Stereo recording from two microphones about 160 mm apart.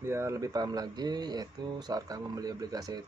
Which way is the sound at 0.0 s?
15° right (ahead or behind).